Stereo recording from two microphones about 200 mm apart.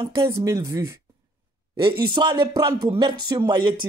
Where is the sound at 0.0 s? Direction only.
15° right (ahead or behind).